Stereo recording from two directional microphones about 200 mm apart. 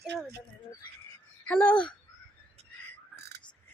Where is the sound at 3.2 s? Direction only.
55° right (ahead or behind).